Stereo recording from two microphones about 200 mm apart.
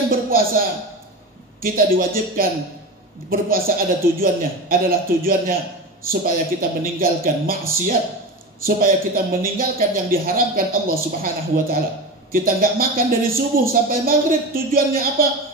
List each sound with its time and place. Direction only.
0.1 s a sound: 45° right (ahead or behind)
1.6 s a man's voice: 45° right (ahead or behind)
6.8 s a man's voice: 45° right (ahead or behind)